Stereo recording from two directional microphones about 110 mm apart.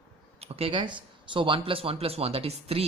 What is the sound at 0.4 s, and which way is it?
Speech, 65° right (ahead or behind).